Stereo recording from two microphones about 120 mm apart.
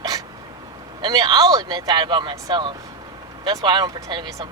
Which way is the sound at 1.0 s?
35° right (ahead or behind).